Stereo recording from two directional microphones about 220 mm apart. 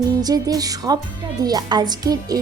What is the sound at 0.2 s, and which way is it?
A woman's voice, 15° right (ahead or behind).